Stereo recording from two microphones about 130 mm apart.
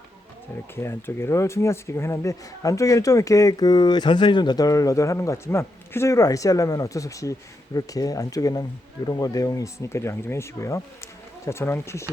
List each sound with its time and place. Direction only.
0.8 s speech: 20° left (ahead or behind)